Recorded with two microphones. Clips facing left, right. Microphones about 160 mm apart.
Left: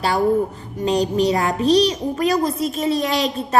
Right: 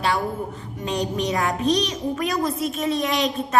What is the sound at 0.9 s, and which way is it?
A child's voice, 35° left (ahead or behind).